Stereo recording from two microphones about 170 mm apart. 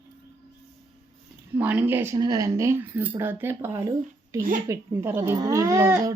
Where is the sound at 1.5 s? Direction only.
10° right (ahead or behind).